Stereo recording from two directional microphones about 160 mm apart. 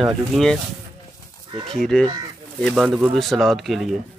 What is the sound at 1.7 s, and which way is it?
Speech, 5° left (ahead or behind).